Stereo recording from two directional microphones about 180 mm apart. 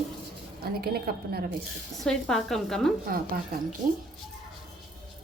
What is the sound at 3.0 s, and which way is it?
Speech, 55° right (ahead or behind).